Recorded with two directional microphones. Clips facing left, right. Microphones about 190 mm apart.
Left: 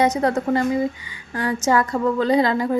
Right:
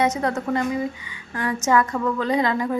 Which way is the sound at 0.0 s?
35° left (ahead or behind).